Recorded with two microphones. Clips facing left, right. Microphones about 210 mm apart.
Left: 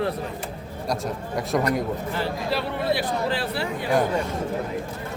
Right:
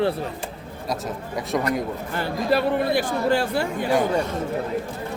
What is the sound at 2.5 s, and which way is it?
Speech, 50° right (ahead or behind).